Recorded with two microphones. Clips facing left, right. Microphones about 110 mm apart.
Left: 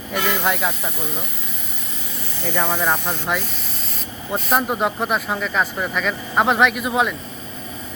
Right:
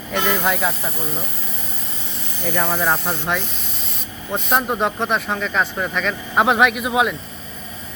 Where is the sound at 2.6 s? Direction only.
5° right (ahead or behind).